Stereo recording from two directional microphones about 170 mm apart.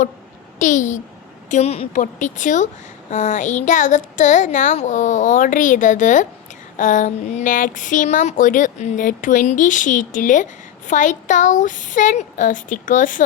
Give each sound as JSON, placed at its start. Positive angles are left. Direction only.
{"t": 0.6, "sound": "speech", "side_deg": 45}